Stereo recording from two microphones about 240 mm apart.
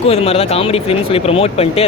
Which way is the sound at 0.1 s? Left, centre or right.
Left.